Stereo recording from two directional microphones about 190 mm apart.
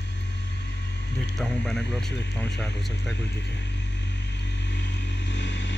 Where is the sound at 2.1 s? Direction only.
65° left (ahead or behind).